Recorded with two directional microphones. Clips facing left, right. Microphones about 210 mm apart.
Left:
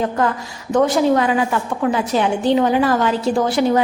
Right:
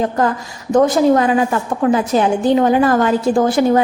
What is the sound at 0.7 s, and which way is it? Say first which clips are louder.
A woman's voice: right 3 dB; 40° right (ahead or behind).